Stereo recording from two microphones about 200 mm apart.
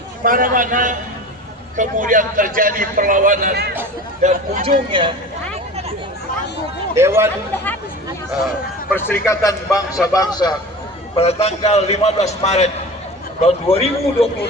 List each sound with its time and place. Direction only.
0.3 s a man's voice: 45° right (ahead or behind)
4.2 s speech: 40° right (ahead or behind)
4.9 s speech: 25° right (ahead or behind)
6.9 s speech: 10° right (ahead or behind)
8.9 s a man's voice: 10° left (ahead or behind)
11.2 s a man's voice: 30° left (ahead or behind)